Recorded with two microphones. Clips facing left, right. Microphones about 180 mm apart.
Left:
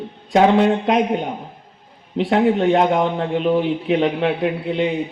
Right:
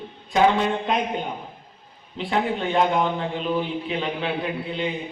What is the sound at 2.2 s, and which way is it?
A man's voice, 75° left (ahead or behind).